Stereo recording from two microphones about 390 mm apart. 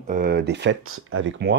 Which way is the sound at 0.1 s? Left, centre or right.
Right.